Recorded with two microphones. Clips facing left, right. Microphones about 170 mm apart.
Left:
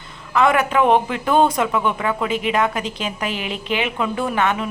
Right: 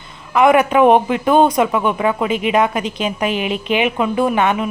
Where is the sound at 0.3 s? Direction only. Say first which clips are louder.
Right 5 dB; 15° right (ahead or behind).